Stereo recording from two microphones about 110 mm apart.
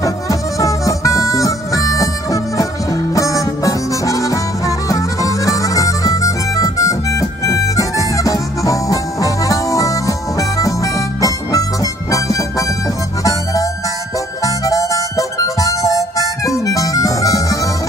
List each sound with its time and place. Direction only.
0.0 s music: 30° left (ahead or behind)
14.4 s harmonica: 30° left (ahead or behind)